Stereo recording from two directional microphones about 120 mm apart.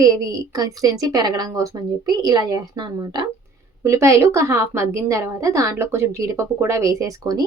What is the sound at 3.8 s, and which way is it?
A woman's voice, 25° right (ahead or behind).